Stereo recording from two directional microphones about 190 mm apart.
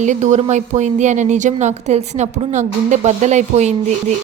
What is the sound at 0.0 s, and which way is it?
A woman's voice, 40° right (ahead or behind).